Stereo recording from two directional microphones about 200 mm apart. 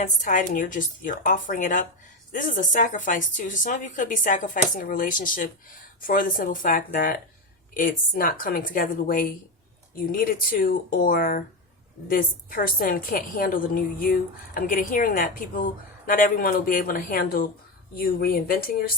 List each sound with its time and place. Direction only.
0.0 s a woman's voice: 40° left (ahead or behind)